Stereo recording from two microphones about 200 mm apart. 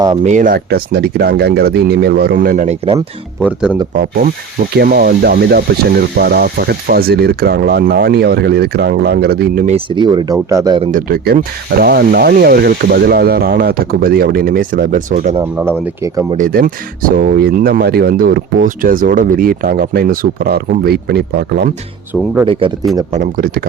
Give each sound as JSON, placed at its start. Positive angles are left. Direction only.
{"t": 0.2, "sound": "speech", "side_deg": -40}
{"t": 2.8, "sound": "speech", "side_deg": -25}
{"t": 4.7, "sound": "speech", "side_deg": -50}
{"t": 9.6, "sound": "speech", "side_deg": -25}
{"t": 10.9, "sound": "speech", "side_deg": -50}
{"t": 16.0, "sound": "speech", "side_deg": -15}
{"t": 16.4, "sound": "speech", "side_deg": -45}
{"t": 22.4, "sound": "speech", "side_deg": -25}
{"t": 23.1, "sound": "speech", "side_deg": -45}